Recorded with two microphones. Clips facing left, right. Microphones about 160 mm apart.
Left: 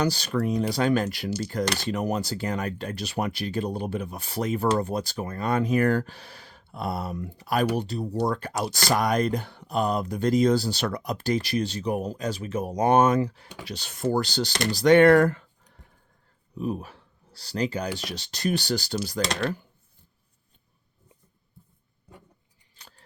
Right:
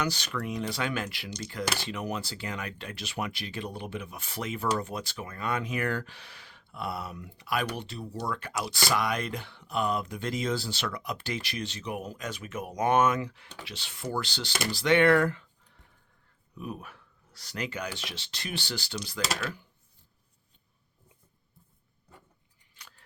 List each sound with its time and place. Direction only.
0.0 s speech: 35° left (ahead or behind)
1.6 s speech: 5° right (ahead or behind)
1.9 s speech: 40° left (ahead or behind)
16.6 s speech: 30° left (ahead or behind)
22.7 s a sound: 35° left (ahead or behind)